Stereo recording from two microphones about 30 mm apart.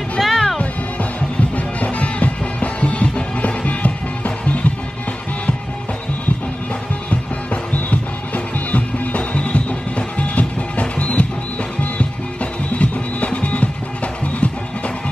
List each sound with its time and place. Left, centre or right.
0.2 s music: centre
1.8 s music: left
8.5 s music: left